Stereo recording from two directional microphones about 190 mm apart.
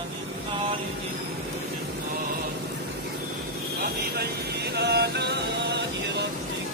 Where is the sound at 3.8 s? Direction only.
55° right (ahead or behind).